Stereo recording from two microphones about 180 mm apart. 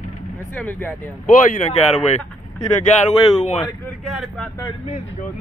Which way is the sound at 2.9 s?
40° left (ahead or behind).